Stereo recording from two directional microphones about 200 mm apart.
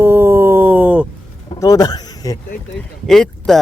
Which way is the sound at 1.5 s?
15° left (ahead or behind).